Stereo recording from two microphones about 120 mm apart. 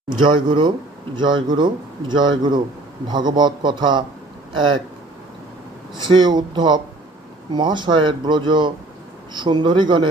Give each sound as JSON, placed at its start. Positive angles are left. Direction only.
{"t": 0.1, "sound": "speech", "side_deg": -40}
{"t": 6.0, "sound": "speech", "side_deg": -40}